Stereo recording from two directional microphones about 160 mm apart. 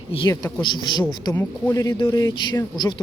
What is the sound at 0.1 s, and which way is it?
Speech, 30° left (ahead or behind).